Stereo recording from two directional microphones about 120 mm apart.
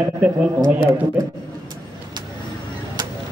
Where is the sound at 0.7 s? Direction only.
15° right (ahead or behind).